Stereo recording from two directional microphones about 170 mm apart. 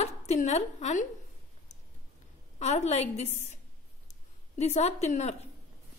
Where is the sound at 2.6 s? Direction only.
40° left (ahead or behind).